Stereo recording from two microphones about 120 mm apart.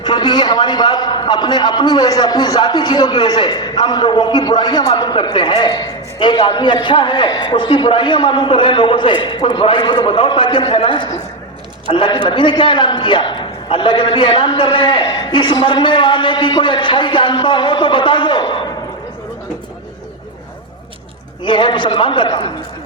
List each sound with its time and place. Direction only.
0.0 s a man's voice: 35° left (ahead or behind)
21.4 s a man's voice: 45° left (ahead or behind)